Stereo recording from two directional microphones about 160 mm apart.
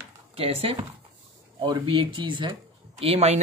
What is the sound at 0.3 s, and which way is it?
Speech, 40° right (ahead or behind).